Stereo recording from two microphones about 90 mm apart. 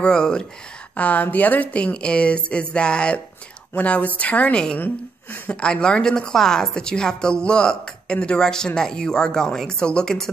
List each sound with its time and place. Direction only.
0.0 s a woman's voice: 10° left (ahead or behind)
5.5 s a woman's voice: 10° left (ahead or behind)